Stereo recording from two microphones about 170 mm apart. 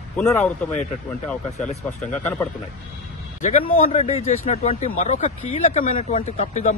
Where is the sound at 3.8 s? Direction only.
40° left (ahead or behind).